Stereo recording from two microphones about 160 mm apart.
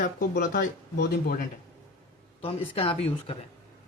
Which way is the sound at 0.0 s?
60° left (ahead or behind).